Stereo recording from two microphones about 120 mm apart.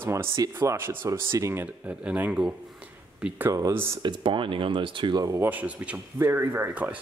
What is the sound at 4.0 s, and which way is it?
Speech, 40° right (ahead or behind).